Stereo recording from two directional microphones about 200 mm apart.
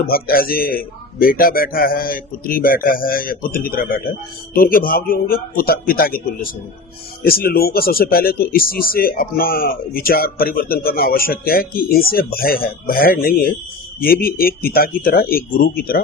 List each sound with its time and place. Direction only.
0.1 s speech: 50° left (ahead or behind)